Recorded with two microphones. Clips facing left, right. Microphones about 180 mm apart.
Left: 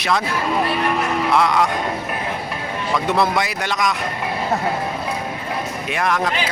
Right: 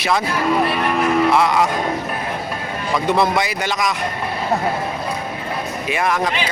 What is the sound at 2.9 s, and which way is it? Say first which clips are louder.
Speech: right 2 dB; centre (ahead or behind).